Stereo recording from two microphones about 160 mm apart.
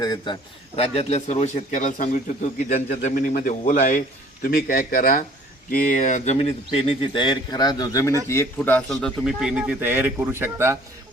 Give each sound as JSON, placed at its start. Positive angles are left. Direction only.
{"t": 0.0, "sound": "a man's voice", "side_deg": 25}
{"t": 0.8, "sound": "a man's voice", "side_deg": 40}
{"t": 4.4, "sound": "speech", "side_deg": 65}
{"t": 5.7, "sound": "a man's voice", "side_deg": 50}